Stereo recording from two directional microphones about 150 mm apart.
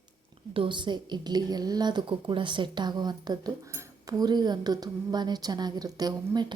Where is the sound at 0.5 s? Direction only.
30° right (ahead or behind).